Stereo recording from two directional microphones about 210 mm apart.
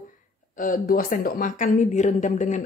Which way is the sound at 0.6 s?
40° left (ahead or behind).